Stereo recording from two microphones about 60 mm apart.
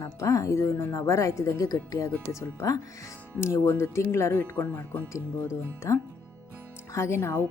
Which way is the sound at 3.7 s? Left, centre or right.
Left.